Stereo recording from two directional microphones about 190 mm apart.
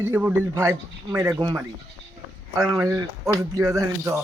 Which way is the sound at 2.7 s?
15° right (ahead or behind).